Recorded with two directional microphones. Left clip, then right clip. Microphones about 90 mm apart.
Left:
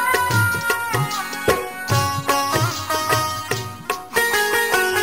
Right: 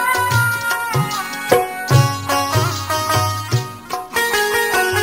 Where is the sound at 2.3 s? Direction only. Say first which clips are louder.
Right 1 dB; 25° right (ahead or behind).